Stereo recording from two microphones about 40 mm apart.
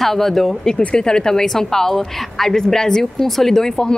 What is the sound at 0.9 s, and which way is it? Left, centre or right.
A woman's voice, centre.